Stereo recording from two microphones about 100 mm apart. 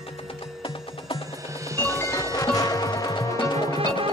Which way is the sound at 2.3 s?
40° left (ahead or behind).